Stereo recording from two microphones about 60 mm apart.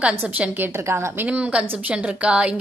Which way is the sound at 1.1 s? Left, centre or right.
Right.